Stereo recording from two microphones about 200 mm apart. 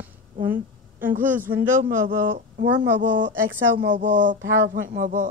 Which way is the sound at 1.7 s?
40° right (ahead or behind).